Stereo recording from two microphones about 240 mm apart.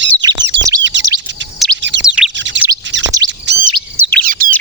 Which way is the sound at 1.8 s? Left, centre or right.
Right.